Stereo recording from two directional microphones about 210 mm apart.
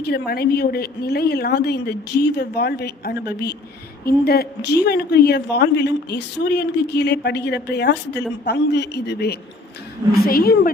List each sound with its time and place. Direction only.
0.0 s a woman's voice: 50° left (ahead or behind)